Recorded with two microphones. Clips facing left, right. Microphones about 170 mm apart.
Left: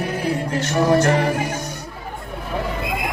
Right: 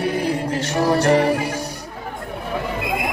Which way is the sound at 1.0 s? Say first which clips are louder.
Right 2 dB; 35° right (ahead or behind).